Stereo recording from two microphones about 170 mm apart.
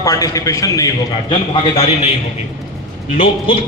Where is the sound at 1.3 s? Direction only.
35° left (ahead or behind).